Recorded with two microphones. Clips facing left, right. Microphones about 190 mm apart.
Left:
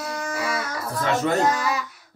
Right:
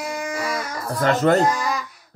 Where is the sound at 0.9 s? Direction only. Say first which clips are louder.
Right 5 dB; 60° right (ahead or behind).